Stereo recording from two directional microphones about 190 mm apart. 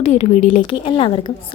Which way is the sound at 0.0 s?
35° left (ahead or behind).